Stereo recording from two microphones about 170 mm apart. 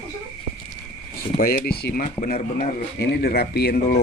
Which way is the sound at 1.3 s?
60° left (ahead or behind).